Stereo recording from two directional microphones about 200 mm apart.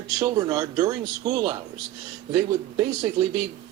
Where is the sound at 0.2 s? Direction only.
20° right (ahead or behind).